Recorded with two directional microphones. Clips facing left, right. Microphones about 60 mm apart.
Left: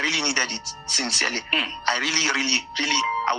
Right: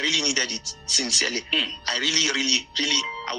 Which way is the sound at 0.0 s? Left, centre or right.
Left.